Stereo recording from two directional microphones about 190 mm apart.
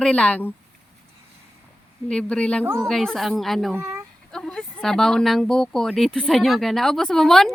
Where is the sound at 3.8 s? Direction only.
15° right (ahead or behind).